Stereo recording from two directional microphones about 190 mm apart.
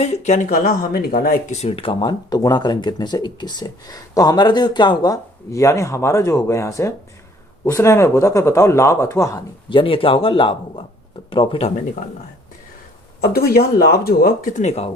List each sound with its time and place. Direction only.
0.0 s speech: 35° left (ahead or behind)
1.5 s speech: 30° left (ahead or behind)
13.2 s speech: 55° left (ahead or behind); by 14.8 s 35° left (ahead or behind)